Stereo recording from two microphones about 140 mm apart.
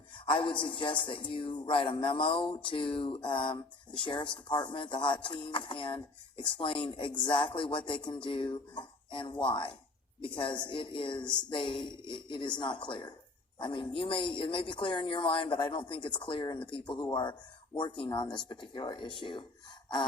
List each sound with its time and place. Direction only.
0.3 s a man's voice: 35° left (ahead or behind)